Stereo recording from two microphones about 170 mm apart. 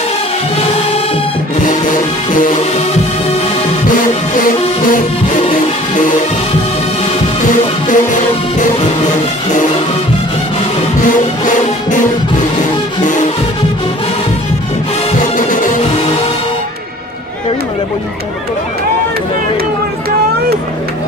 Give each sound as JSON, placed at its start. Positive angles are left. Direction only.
{"t": 5.4, "sound": "music", "side_deg": 50}
{"t": 7.9, "sound": "music", "side_deg": 50}
{"t": 11.4, "sound": "music", "side_deg": 50}
{"t": 13.0, "sound": "music", "side_deg": 45}
{"t": 15.3, "sound": "music", "side_deg": 50}